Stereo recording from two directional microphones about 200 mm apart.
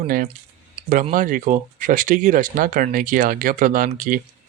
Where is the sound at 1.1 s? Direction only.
40° right (ahead or behind).